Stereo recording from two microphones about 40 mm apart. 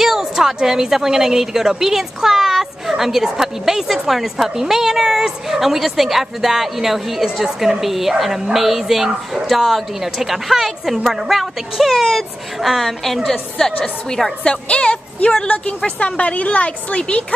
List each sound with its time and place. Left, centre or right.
0.0 s a woman's voice: centre
7.4 s a woman's voice: centre
7.8 s speech: centre
14.4 s a woman's voice: left